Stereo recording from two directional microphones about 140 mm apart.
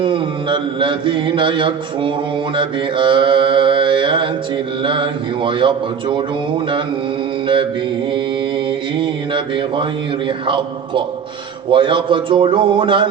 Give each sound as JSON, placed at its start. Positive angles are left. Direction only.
{"t": 0.0, "sound": "mantra", "side_deg": -35}
{"t": 7.4, "sound": "mantra", "side_deg": -35}
{"t": 10.2, "sound": "mantra", "side_deg": -35}